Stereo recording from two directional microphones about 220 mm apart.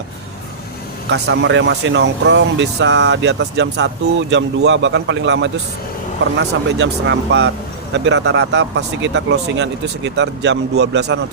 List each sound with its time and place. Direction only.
1.1 s speech: 55° right (ahead or behind)